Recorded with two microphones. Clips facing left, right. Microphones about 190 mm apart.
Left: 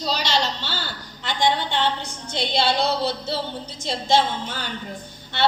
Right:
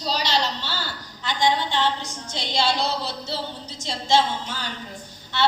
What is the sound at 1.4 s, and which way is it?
A woman's voice, 55° left (ahead or behind).